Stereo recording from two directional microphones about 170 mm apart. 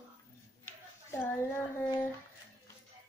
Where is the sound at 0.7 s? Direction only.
10° left (ahead or behind).